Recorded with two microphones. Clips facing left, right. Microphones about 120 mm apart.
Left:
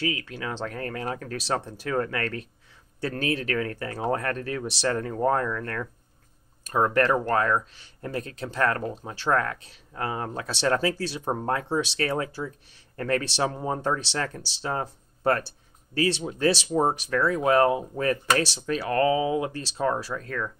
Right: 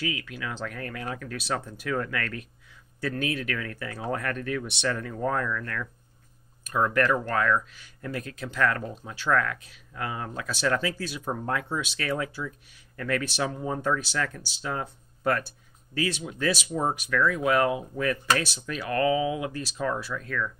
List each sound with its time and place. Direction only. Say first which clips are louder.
0.0 s speech: left 3 dB; 35° left (ahead or behind)